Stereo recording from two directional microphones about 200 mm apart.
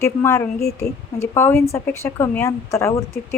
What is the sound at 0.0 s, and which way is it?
A woman's voice, 10° left (ahead or behind).